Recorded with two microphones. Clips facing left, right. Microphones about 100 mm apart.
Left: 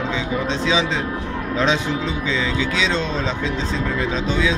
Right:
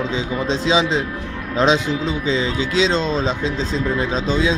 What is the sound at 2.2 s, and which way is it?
Speech, 30° right (ahead or behind).